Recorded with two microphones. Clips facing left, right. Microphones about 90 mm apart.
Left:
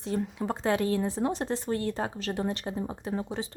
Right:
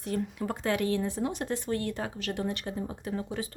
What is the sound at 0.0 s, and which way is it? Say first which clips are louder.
Speech: left 1 dB; 25° left (ahead or behind).